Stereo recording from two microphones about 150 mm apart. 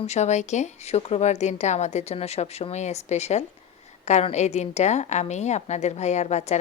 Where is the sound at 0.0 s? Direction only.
50° left (ahead or behind).